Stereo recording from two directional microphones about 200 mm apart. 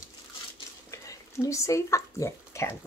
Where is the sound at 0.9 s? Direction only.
15° left (ahead or behind).